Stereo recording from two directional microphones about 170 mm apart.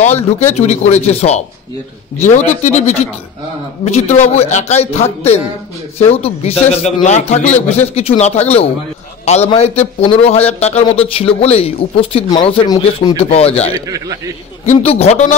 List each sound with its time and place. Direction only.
0.0 s a man's voice: 40° left (ahead or behind)
13.8 s a man's voice: 20° right (ahead or behind)
14.7 s a man's voice: 35° left (ahead or behind)